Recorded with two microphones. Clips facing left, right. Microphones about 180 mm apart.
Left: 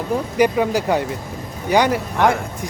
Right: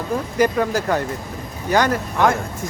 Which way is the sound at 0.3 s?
15° left (ahead or behind).